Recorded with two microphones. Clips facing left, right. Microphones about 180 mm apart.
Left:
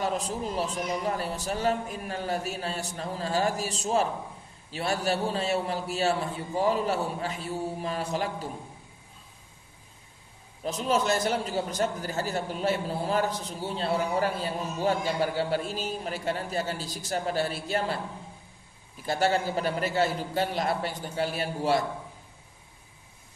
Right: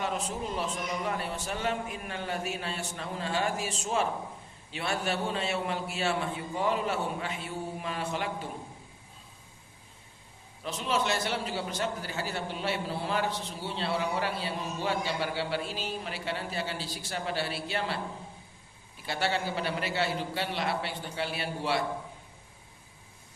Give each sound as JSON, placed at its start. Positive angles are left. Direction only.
{"t": 0.0, "sound": "a man's voice", "side_deg": 35}
{"t": 10.6, "sound": "a man's voice", "side_deg": 40}
{"t": 19.0, "sound": "a man's voice", "side_deg": 40}